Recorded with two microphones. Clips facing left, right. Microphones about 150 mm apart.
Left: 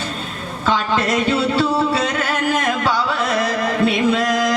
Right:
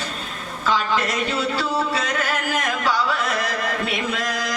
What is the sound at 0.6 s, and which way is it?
Music, 30° left (ahead or behind).